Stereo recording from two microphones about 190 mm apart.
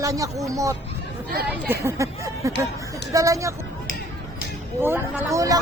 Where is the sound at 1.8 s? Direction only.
15° right (ahead or behind).